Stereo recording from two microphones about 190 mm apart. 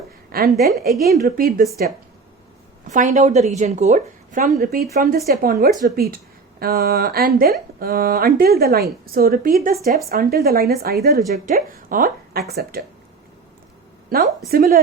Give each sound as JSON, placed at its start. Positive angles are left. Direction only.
{"t": 0.3, "sound": "a woman's voice", "side_deg": -50}
{"t": 2.9, "sound": "a woman's voice", "side_deg": -40}
{"t": 14.1, "sound": "speech", "side_deg": -50}